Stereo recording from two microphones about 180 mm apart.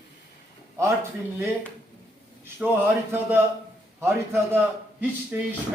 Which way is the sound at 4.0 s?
15° right (ahead or behind).